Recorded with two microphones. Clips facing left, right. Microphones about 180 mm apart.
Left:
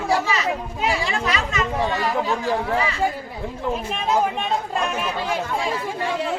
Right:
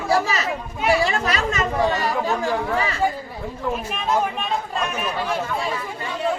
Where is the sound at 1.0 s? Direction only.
40° right (ahead or behind).